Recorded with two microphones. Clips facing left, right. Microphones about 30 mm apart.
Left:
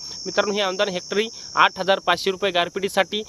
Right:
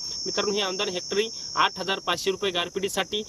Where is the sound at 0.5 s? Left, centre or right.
Left.